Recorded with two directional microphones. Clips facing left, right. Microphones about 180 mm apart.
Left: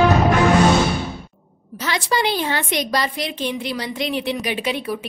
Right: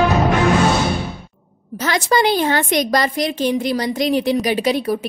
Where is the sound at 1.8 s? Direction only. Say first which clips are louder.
Right 5 dB; 45° right (ahead or behind).